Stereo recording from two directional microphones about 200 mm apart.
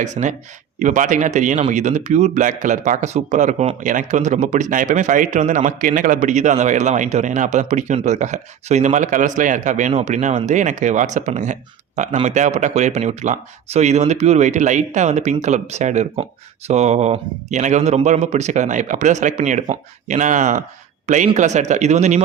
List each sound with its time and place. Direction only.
0.0 s a man's voice: 40° right (ahead or behind)